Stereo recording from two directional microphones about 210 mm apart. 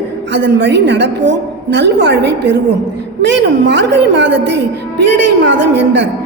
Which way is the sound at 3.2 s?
55° right (ahead or behind).